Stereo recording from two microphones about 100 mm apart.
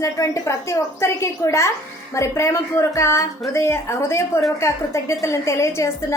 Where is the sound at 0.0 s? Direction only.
30° left (ahead or behind).